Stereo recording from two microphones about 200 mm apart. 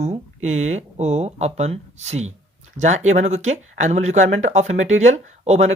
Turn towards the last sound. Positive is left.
turn(degrees=-35)  # may be behind; listen again after turning